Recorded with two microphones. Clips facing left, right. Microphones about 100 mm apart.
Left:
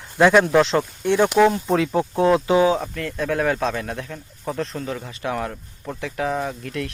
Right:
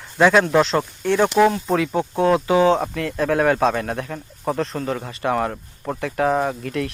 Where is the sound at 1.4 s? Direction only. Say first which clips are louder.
Even; 5° right (ahead or behind).